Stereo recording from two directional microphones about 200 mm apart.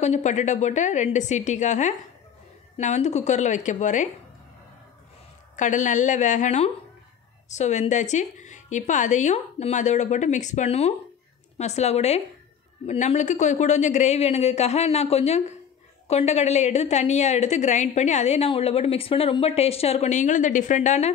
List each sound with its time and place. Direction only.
0.0 s a woman's voice: 35° left (ahead or behind)
5.6 s a woman's voice: 40° left (ahead or behind)